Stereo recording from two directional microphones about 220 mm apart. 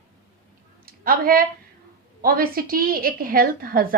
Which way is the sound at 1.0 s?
40° right (ahead or behind).